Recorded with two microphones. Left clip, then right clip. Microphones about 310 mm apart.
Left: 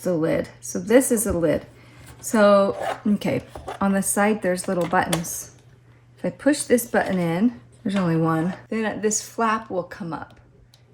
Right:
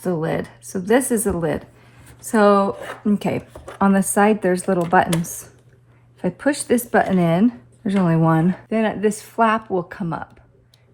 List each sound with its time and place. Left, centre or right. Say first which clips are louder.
0.0 s a woman's voice: left 1 dB; centre
2.7 s speech: left 5 dB; centre
3.1 s a woman's voice: right 2 dB; centre
6.2 s a woman's voice: right 1 dB; centre